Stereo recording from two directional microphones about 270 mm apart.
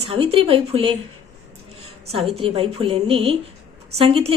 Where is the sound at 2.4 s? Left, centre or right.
Centre.